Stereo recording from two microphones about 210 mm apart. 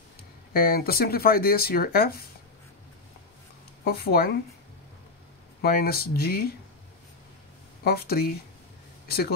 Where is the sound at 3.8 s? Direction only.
45° left (ahead or behind).